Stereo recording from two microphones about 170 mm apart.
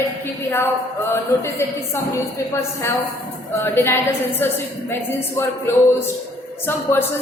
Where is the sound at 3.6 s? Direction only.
15° left (ahead or behind).